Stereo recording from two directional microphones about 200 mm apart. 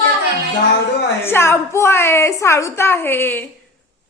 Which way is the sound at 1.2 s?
10° left (ahead or behind).